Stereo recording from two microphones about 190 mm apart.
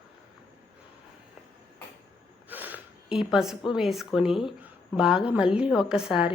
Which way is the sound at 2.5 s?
10° right (ahead or behind).